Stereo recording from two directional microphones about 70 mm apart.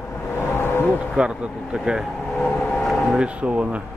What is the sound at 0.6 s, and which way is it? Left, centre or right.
Vehicle, left.